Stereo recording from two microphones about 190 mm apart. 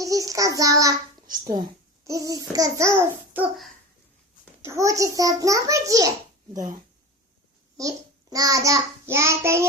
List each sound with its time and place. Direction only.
0.0 s child singing: 20° right (ahead or behind)
2.0 s a child's voice: 20° right (ahead or behind)
7.8 s child singing: 20° right (ahead or behind)